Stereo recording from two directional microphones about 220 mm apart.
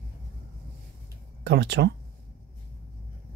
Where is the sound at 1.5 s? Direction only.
50° right (ahead or behind).